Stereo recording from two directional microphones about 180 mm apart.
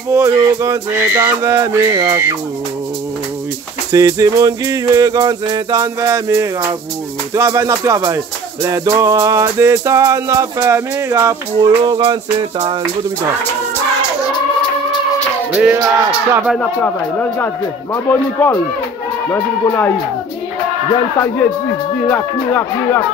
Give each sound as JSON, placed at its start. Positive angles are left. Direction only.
{"t": 0.1, "sound": "music", "side_deg": -15}
{"t": 3.9, "sound": "music", "side_deg": -20}
{"t": 15.5, "sound": "music", "side_deg": -5}
{"t": 16.4, "sound": "speech", "side_deg": 5}
{"t": 22.0, "sound": "speech", "side_deg": 10}